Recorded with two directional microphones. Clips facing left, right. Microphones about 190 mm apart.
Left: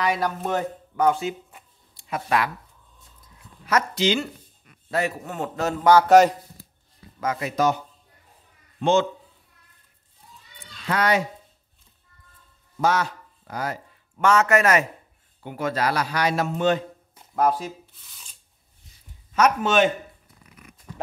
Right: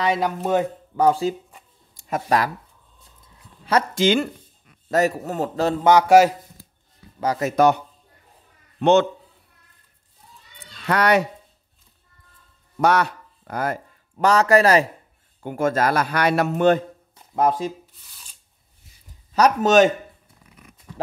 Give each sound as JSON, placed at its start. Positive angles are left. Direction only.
{"t": 0.0, "sound": "speech", "side_deg": -25}
{"t": 0.4, "sound": "a man's voice", "side_deg": -10}
{"t": 0.9, "sound": "a man's voice", "side_deg": -35}
{"t": 2.0, "sound": "speech", "side_deg": -45}
{"t": 3.9, "sound": "a man's voice", "side_deg": -50}
{"t": 4.9, "sound": "a man's voice", "side_deg": -40}
{"t": 5.9, "sound": "a man's voice", "side_deg": -15}
{"t": 7.2, "sound": "a man's voice", "side_deg": -40}
{"t": 10.6, "sound": "children playing", "side_deg": -65}
{"t": 12.7, "sound": "speech", "side_deg": -65}
{"t": 15.4, "sound": "a man's voice", "side_deg": -50}
{"t": 17.4, "sound": "speech", "side_deg": -25}
{"t": 19.3, "sound": "a man's voice", "side_deg": -40}